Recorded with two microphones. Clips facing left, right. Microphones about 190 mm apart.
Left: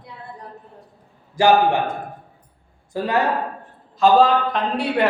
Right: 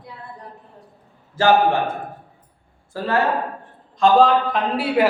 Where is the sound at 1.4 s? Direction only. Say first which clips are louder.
Left 1 dB; 15° left (ahead or behind).